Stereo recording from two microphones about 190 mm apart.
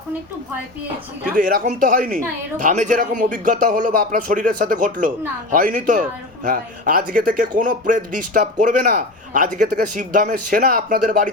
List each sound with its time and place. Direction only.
1.4 s speech: 45° right (ahead or behind)